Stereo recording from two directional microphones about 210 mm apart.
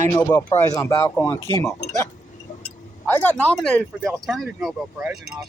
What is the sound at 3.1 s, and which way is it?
Speech, 10° left (ahead or behind).